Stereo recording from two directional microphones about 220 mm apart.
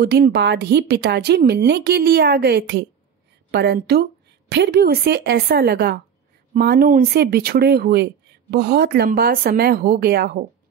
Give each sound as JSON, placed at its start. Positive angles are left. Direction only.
{"t": 0.0, "sound": "speech", "side_deg": -45}